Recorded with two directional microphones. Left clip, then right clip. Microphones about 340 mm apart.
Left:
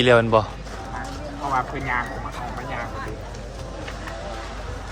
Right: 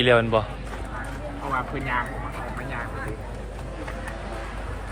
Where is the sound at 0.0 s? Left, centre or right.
Centre.